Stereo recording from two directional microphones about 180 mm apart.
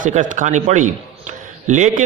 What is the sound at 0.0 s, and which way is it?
A man's voice, 45° right (ahead or behind).